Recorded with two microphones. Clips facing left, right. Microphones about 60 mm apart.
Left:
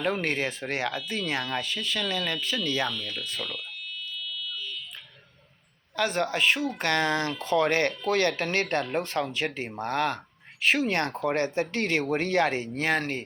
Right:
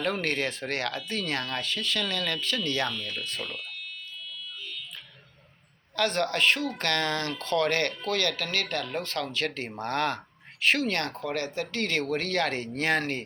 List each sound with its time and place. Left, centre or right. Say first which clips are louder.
0.0 s speech: left 1 dB; centre
2.9 s speech: even; right
6.0 s speech: even; centre
10.8 s speech: left 3 dB; left; by 13.2 s centre